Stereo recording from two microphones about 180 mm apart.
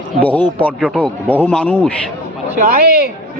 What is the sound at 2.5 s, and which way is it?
Speech, 50° right (ahead or behind).